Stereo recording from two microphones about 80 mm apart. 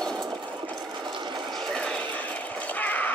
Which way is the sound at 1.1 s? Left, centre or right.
Right.